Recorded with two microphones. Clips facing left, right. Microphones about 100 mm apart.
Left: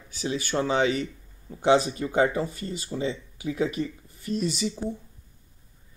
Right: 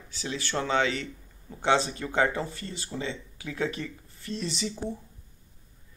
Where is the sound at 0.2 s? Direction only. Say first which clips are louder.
Left 4 dB; 15° left (ahead or behind).